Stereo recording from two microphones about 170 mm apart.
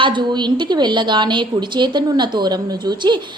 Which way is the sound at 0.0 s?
25° right (ahead or behind).